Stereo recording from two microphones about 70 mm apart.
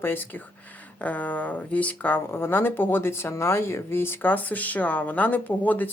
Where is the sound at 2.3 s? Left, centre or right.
Left.